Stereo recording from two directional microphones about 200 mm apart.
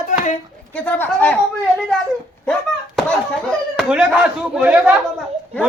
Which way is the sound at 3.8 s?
5° right (ahead or behind).